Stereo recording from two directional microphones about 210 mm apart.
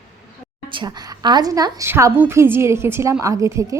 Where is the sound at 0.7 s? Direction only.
20° right (ahead or behind).